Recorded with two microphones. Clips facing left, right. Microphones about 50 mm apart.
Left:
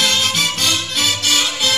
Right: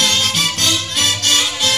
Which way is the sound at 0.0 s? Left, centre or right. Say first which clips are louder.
Even; centre.